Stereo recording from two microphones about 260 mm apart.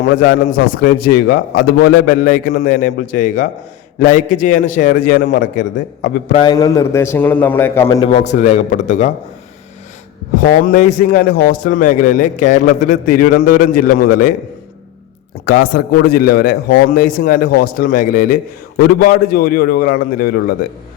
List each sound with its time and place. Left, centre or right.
0.0 s a man's voice: left
5.5 s a man's voice: left
6.4 s a man's voice: centre
8.3 s a man's voice: left
10.3 s a man's voice: left
15.4 s a man's voice: left